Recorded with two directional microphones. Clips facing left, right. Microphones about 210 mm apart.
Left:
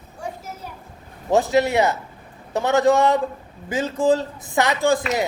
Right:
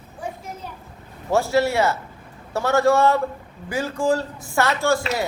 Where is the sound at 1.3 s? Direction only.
20° left (ahead or behind).